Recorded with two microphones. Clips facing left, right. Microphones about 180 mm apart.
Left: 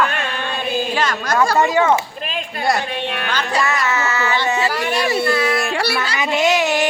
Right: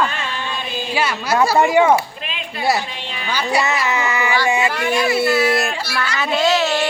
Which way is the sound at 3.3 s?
10° right (ahead or behind).